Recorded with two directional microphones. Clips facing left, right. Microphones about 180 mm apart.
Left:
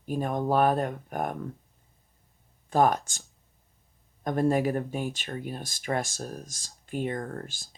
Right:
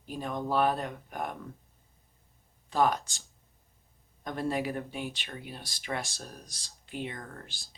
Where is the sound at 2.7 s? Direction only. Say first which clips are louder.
Left 4 dB; 45° left (ahead or behind).